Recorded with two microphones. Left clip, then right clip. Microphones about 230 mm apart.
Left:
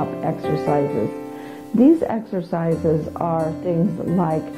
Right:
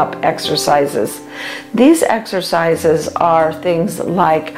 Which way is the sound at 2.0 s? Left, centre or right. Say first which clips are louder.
Right 9 dB; centre.